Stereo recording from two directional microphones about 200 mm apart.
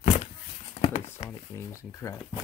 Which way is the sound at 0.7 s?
30° left (ahead or behind).